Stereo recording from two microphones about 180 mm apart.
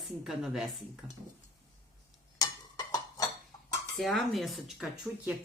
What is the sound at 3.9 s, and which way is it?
Speech, centre (ahead or behind).